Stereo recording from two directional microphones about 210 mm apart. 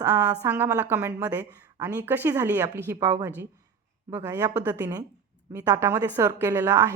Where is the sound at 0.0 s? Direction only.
15° right (ahead or behind).